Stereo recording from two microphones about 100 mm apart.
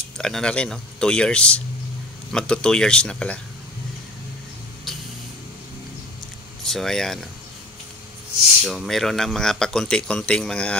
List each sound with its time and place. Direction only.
0.2 s speech: 5° left (ahead or behind)
6.6 s speech: 5° left (ahead or behind)
8.6 s speech: centre (ahead or behind)